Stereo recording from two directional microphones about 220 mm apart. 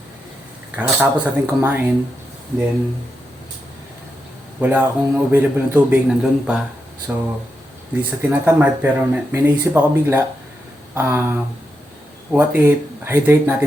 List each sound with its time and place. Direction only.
0.8 s speech: 10° right (ahead or behind)
4.6 s speech: 10° right (ahead or behind)